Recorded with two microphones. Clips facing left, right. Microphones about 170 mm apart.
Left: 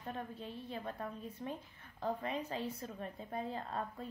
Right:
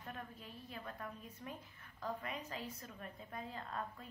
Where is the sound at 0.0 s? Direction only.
30° left (ahead or behind).